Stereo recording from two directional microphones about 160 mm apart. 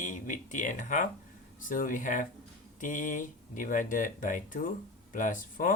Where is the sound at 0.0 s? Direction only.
55° left (ahead or behind).